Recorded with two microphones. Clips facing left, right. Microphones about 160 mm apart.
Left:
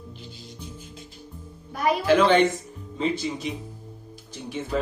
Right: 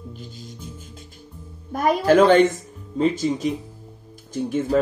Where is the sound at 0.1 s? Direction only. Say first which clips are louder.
Right 4 dB; 45° right (ahead or behind).